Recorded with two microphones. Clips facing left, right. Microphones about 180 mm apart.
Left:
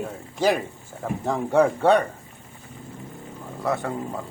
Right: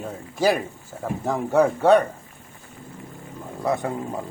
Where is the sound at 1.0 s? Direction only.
Centre (ahead or behind).